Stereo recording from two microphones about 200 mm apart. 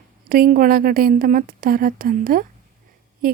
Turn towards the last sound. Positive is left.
turn(degrees=-45)  # may be behind; listen again after turning